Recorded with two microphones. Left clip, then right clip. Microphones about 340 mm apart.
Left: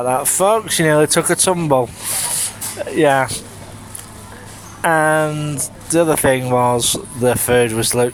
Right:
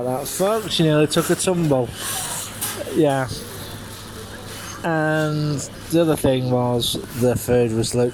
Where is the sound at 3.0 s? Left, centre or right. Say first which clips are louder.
Left 6 dB; left.